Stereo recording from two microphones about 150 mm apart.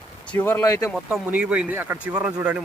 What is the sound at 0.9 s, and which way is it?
Speech, 5° right (ahead or behind).